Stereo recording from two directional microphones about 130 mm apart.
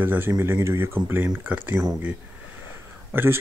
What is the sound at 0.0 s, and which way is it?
Speech, 15° right (ahead or behind).